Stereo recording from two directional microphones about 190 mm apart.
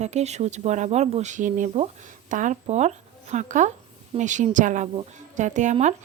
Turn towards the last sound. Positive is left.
turn(degrees=-40)  # may be behind; listen again after turning